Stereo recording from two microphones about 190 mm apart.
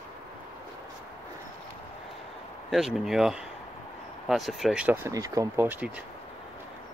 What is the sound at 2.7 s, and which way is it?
Speech, centre (ahead or behind).